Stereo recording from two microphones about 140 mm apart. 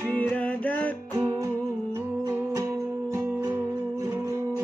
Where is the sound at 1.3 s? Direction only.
20° right (ahead or behind).